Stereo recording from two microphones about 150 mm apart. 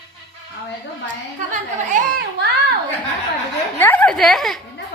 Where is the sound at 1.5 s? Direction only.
60° right (ahead or behind).